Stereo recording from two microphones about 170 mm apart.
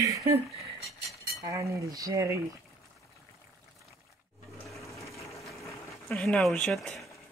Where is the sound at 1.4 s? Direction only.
20° right (ahead or behind).